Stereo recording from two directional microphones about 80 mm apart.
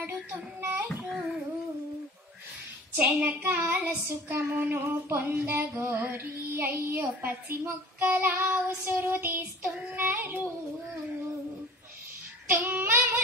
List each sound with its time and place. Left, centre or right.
0.0 s child singing: right
3.0 s child singing: right
6.7 s a child's voice: right
7.0 s child singing: right
12.4 s child singing: right